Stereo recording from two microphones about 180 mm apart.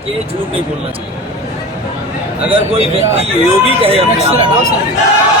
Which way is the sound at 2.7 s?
35° right (ahead or behind).